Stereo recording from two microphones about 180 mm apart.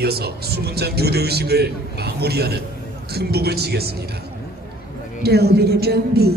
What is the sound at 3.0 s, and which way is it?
Speech, 60° right (ahead or behind).